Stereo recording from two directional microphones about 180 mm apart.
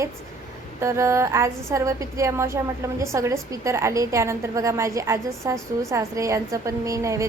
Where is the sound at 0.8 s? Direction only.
15° right (ahead or behind).